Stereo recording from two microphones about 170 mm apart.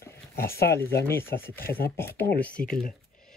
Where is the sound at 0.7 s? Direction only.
15° left (ahead or behind).